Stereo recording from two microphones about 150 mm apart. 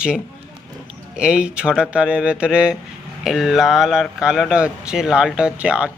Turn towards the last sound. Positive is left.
turn(degrees=-5)  # may be behind; listen again after turning